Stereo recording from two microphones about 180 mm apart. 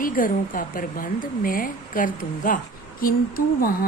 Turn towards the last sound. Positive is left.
turn(degrees=55)  # may be behind; listen again after turning